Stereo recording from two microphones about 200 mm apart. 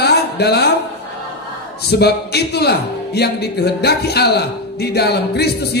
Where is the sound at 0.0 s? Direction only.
55° left (ahead or behind).